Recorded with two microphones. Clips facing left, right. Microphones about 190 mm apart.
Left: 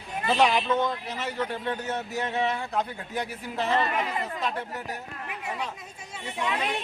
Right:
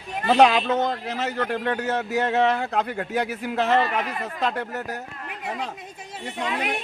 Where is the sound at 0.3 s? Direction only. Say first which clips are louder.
Right 5 dB; 75° right (ahead or behind).